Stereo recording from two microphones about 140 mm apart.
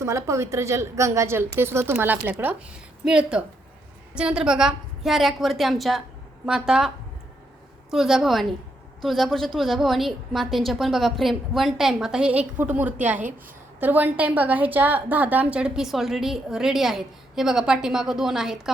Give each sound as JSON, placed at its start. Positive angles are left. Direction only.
{"t": 0.0, "sound": "a woman's voice", "side_deg": -20}